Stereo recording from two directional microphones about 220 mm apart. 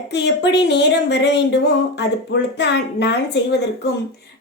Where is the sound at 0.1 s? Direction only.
50° left (ahead or behind).